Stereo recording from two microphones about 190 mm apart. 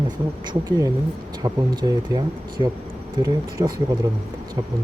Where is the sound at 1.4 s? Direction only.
20° right (ahead or behind).